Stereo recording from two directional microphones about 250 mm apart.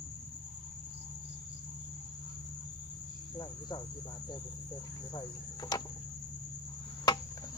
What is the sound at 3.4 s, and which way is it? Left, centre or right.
Cricket, centre.